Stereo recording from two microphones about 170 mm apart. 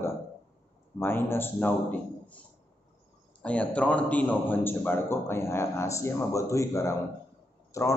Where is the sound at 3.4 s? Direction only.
5° left (ahead or behind).